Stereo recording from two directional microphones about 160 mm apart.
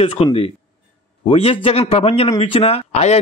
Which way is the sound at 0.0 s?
35° left (ahead or behind).